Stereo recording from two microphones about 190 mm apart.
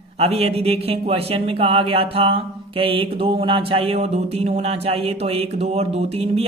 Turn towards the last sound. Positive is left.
turn(degrees=-30)  # may be behind; listen again after turning